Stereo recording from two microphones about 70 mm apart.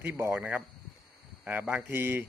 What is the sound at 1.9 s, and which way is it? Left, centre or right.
Speech, right.